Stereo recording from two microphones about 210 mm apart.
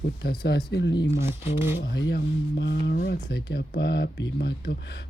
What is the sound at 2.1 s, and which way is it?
Speech, 50° left (ahead or behind).